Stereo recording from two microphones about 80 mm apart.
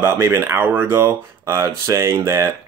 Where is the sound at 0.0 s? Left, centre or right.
Right.